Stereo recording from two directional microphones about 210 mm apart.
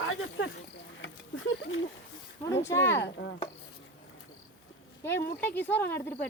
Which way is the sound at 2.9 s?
55° left (ahead or behind).